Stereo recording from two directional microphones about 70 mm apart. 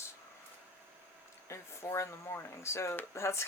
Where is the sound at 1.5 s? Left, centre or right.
Left.